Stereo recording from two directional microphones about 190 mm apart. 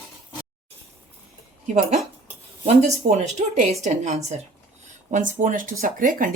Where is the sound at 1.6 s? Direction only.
40° right (ahead or behind).